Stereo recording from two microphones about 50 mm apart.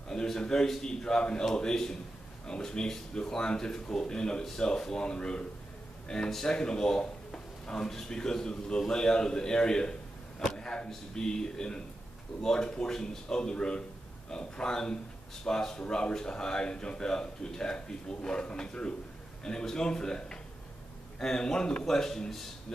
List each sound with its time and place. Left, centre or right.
0.1 s a man's voice: centre
10.6 s a sound: centre
10.9 s speech: centre